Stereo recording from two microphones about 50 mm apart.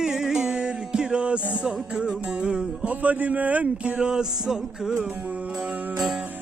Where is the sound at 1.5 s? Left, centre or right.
Right.